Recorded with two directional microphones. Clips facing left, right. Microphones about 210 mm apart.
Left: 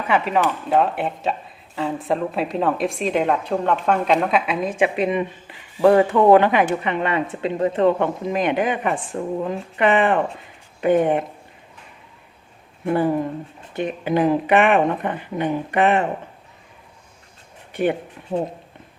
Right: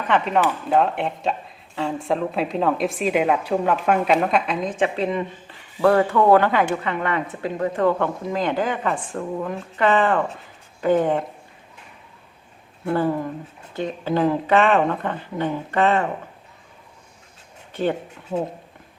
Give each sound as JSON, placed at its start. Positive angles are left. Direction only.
{"t": 0.1, "sound": "speech", "side_deg": 5}
{"t": 12.8, "sound": "speech", "side_deg": 20}
{"t": 17.7, "sound": "speech", "side_deg": 15}